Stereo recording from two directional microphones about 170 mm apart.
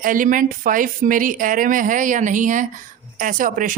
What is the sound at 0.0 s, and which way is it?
Speech, 55° right (ahead or behind).